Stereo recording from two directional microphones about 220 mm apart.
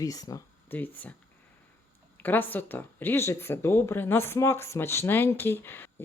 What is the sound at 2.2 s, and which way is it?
Speech, 10° left (ahead or behind).